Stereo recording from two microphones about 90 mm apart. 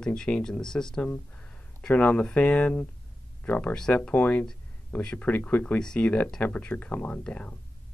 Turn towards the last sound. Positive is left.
turn(degrees=15)  # may be behind; listen again after turning